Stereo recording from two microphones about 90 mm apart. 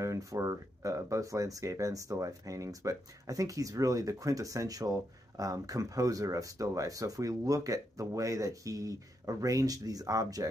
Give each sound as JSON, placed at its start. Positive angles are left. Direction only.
{"t": 0.0, "sound": "speech", "side_deg": -40}